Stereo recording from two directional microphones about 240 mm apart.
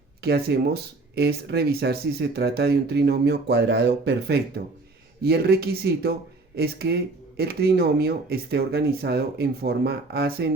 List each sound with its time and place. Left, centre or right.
0.2 s speech: right